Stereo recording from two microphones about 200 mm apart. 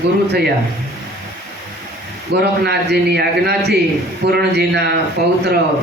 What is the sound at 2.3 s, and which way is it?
A man's voice, 55° right (ahead or behind).